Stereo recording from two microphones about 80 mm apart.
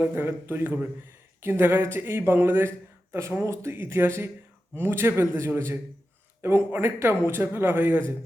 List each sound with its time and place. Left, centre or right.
0.0 s a man's voice: right